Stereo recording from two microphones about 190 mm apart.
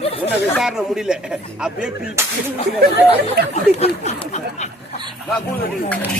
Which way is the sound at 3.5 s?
35° left (ahead or behind).